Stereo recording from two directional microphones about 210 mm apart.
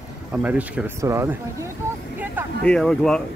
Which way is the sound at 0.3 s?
5° right (ahead or behind).